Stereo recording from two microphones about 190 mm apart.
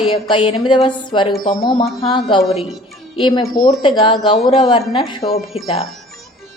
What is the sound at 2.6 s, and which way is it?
Music, centre (ahead or behind).